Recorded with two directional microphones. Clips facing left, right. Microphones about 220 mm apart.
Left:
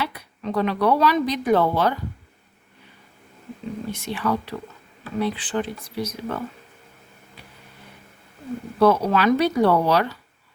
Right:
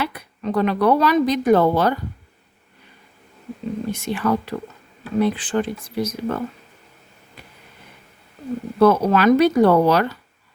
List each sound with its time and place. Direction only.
0.0 s a woman's voice: 50° right (ahead or behind)
4.0 s speech: 50° right (ahead or behind)
8.8 s speech: 50° right (ahead or behind)